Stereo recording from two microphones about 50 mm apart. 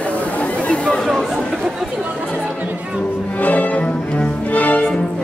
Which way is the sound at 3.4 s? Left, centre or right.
Left.